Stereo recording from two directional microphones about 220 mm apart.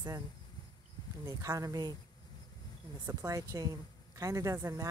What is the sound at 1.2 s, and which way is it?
Speech, 15° right (ahead or behind).